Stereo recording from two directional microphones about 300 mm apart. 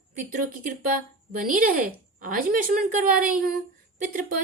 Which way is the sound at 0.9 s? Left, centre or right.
Right.